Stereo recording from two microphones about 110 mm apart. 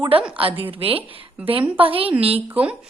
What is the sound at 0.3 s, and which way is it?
A woman's voice, 55° right (ahead or behind).